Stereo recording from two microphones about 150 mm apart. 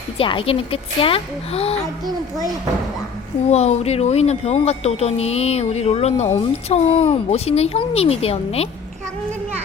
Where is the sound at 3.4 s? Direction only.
45° left (ahead or behind).